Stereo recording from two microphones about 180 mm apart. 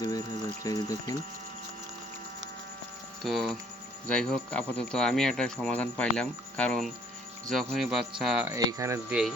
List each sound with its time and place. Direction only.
0.6 s speech: 20° left (ahead or behind)
3.2 s speech: centre (ahead or behind)
8.4 s speech: 15° right (ahead or behind)